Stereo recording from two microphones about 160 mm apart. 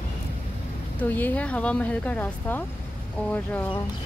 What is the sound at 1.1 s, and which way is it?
Speech, 10° left (ahead or behind).